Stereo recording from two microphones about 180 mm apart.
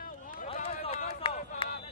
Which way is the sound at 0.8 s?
35° left (ahead or behind).